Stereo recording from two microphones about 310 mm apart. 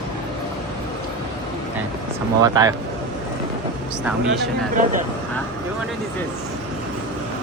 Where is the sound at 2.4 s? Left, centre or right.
Centre.